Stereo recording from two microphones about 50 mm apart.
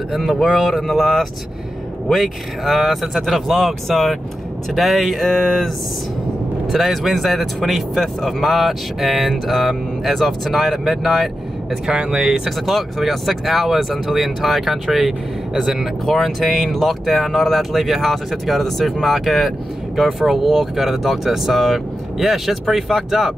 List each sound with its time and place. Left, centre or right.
0.1 s speech: centre
6.7 s speech: centre
11.9 s speech: centre
12.4 s speech: centre